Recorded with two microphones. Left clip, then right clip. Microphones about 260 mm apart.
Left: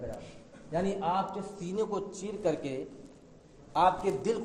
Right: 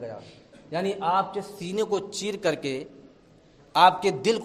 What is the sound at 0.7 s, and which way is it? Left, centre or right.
A man's voice, right.